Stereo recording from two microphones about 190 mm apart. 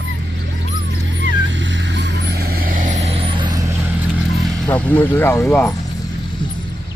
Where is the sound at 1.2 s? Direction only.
75° right (ahead or behind); by 3.5 s 30° right (ahead or behind).